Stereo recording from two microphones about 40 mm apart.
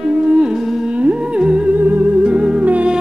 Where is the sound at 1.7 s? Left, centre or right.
Right.